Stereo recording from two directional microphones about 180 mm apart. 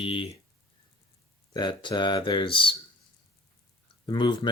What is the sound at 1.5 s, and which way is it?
Speech, 25° left (ahead or behind).